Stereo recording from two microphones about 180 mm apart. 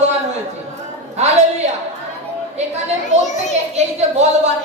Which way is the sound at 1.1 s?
40° right (ahead or behind).